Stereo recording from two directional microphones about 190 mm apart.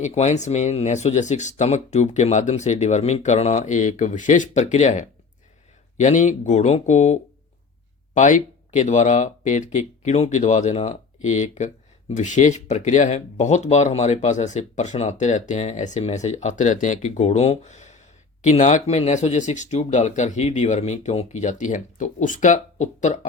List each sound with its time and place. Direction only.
0.0 s speech: 35° left (ahead or behind)